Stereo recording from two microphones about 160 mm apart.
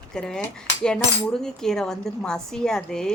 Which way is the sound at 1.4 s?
5° left (ahead or behind).